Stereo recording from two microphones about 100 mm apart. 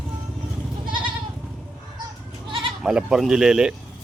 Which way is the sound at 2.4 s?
60° right (ahead or behind).